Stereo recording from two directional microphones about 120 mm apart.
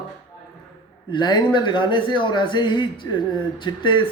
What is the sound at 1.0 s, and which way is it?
Speech, 40° left (ahead or behind).